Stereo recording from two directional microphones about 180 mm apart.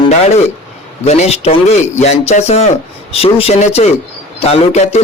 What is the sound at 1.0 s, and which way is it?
A man's voice, 40° left (ahead or behind).